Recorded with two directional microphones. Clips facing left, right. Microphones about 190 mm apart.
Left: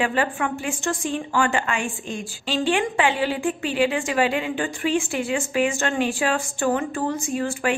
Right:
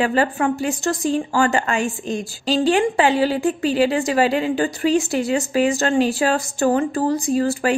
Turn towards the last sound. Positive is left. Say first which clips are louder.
# right 5 dB
turn(degrees=-35)  # may be behind; listen again after turning